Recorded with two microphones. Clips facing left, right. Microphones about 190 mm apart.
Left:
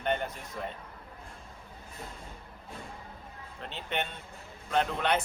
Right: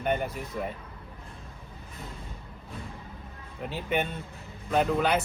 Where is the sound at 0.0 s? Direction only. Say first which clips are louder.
Right 3 dB; 10° right (ahead or behind).